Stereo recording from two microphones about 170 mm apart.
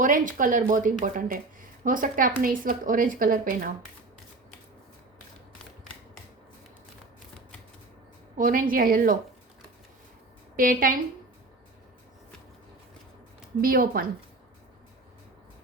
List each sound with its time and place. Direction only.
0.0 s a woman's voice: 50° right (ahead or behind)
8.4 s a woman's voice: 55° right (ahead or behind)
10.6 s a woman's voice: 55° right (ahead or behind)
13.6 s a woman's voice: 60° right (ahead or behind)